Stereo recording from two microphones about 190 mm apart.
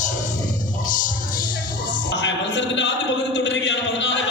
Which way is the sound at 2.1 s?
70° left (ahead or behind).